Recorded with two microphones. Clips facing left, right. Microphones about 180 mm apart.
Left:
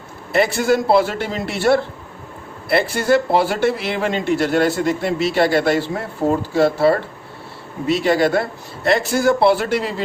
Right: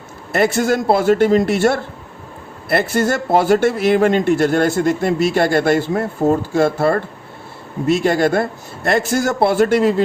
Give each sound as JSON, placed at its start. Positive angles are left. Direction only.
{"t": 0.3, "sound": "a man's voice", "side_deg": -50}